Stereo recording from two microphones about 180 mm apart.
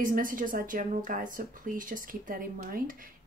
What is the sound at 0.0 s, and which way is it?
Speech, 50° right (ahead or behind).